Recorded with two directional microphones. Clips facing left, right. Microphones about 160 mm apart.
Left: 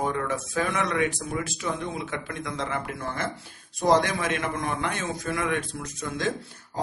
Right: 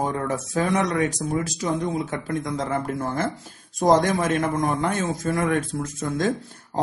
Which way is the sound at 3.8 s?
45° right (ahead or behind).